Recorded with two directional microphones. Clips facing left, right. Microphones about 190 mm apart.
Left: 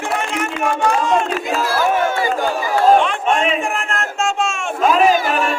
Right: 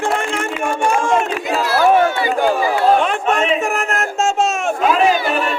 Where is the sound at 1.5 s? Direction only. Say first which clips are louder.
Right 6 dB; 45° left (ahead or behind).